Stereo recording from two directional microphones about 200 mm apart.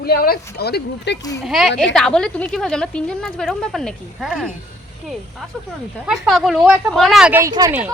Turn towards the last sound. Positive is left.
turn(degrees=-10)  # may be behind; listen again after turning